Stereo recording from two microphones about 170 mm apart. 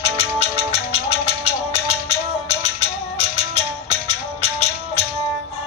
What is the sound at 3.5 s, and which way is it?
Music, 35° left (ahead or behind).